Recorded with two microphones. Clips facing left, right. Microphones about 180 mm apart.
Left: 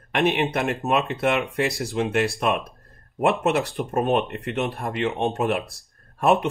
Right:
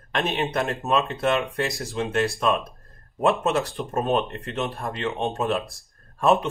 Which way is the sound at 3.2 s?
15° left (ahead or behind).